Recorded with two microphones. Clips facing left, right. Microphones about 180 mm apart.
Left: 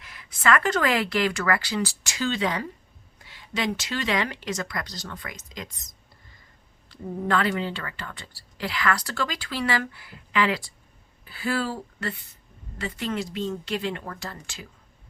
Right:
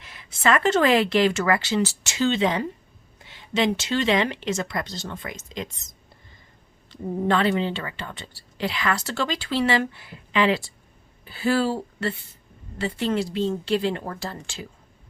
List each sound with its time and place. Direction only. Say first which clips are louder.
0.0 s speech: right 2 dB; 25° right (ahead or behind)